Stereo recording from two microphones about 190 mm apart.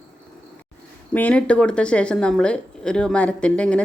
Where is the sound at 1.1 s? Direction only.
5° left (ahead or behind).